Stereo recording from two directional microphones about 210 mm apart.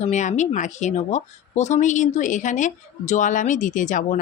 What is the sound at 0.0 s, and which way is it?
Speech, 35° left (ahead or behind).